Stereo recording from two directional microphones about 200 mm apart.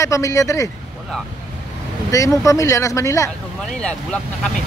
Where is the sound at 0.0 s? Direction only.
15° left (ahead or behind).